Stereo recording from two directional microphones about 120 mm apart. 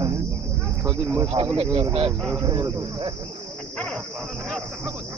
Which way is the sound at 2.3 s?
30° right (ahead or behind).